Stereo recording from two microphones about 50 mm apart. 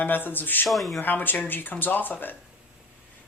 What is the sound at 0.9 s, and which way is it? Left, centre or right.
Speech, left.